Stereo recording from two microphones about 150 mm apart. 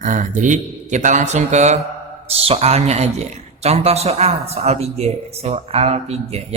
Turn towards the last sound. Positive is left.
turn(degrees=-45)  # may be behind; listen again after turning